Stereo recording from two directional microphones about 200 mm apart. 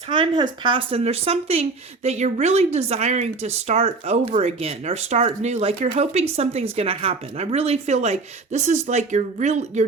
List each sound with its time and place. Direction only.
0.1 s speech: 20° right (ahead or behind)